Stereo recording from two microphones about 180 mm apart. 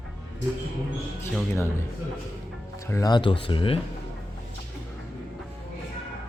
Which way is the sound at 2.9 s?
20° left (ahead or behind).